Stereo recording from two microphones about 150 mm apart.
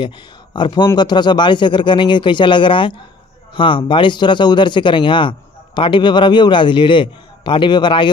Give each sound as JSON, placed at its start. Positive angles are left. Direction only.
{"t": 0.0, "sound": "a man's voice", "side_deg": 30}